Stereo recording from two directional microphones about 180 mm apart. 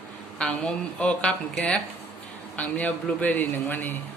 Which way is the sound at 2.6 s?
10° left (ahead or behind).